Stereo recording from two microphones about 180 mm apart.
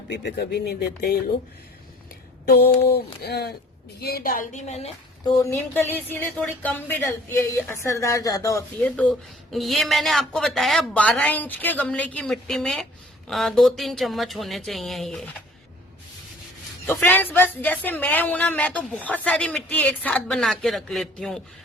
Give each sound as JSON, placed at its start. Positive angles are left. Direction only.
{"t": 0.1, "sound": "speech", "side_deg": 70}
{"t": 2.5, "sound": "a woman's voice", "side_deg": 60}
{"t": 5.2, "sound": "speech", "side_deg": 20}
{"t": 9.0, "sound": "speech", "side_deg": 5}
{"t": 16.8, "sound": "speech", "side_deg": 10}